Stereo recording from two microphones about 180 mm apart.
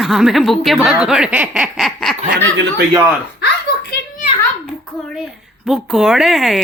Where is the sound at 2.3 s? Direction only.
70° right (ahead or behind).